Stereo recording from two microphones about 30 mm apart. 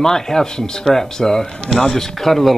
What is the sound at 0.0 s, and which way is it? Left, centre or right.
Speech, centre.